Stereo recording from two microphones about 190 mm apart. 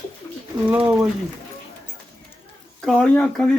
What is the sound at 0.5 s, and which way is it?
Speech, 25° right (ahead or behind).